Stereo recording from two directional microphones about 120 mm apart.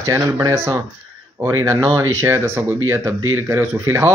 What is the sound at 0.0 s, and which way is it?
Speech, 25° right (ahead or behind).